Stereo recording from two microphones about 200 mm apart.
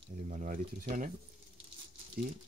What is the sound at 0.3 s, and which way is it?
Speech, 40° right (ahead or behind).